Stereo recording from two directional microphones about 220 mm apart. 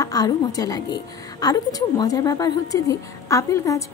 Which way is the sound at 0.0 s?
15° left (ahead or behind).